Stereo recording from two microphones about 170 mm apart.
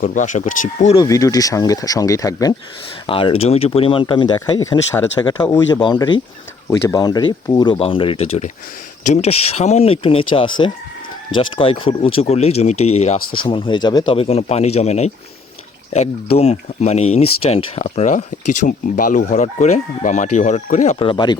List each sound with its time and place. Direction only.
0.0 s speech: 50° left (ahead or behind)
0.9 s speech: 20° left (ahead or behind)
3.1 s speech: 30° left (ahead or behind)